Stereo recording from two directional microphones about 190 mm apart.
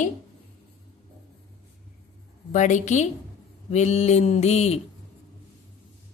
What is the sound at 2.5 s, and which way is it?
Mantra, 40° left (ahead or behind).